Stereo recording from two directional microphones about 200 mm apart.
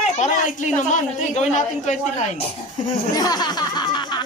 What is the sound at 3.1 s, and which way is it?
Music, 20° left (ahead or behind).